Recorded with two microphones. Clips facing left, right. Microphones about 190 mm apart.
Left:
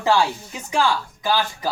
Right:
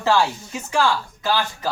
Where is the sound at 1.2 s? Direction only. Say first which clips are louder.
Left 1 dB; 15° left (ahead or behind).